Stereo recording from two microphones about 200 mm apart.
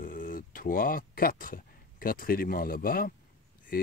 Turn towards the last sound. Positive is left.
turn(degrees=45)  # may be behind; listen again after turning